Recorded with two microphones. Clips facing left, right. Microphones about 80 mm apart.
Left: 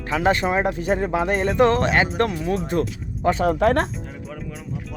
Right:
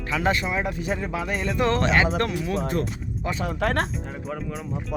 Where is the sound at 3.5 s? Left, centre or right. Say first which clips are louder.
Left 6 dB; left.